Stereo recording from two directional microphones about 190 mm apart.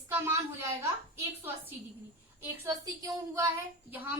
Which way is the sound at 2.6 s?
15° right (ahead or behind).